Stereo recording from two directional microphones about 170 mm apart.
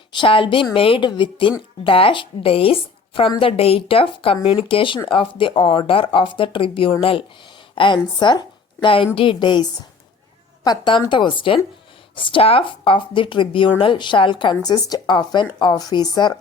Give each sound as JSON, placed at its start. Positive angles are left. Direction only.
{"t": 0.1, "sound": "a woman's voice", "side_deg": 30}